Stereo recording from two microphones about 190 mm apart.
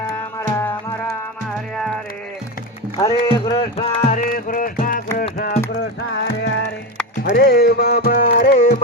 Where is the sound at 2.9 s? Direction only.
20° left (ahead or behind).